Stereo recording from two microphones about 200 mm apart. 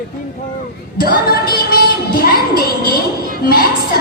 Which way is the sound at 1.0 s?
50° left (ahead or behind).